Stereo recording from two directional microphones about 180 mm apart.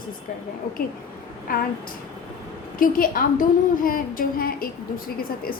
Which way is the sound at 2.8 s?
50° left (ahead or behind).